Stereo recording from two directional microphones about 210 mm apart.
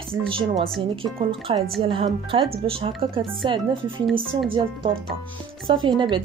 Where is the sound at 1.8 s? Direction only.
25° right (ahead or behind).